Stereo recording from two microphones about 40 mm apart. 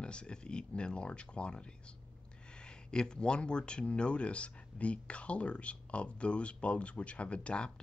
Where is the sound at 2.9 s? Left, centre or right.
Left.